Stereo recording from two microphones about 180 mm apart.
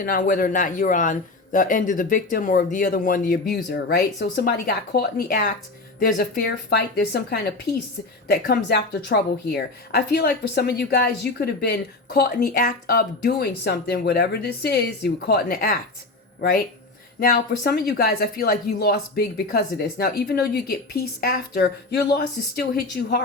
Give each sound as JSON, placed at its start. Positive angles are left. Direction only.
{"t": 0.0, "sound": "speech", "side_deg": 50}
{"t": 17.2, "sound": "speech", "side_deg": 55}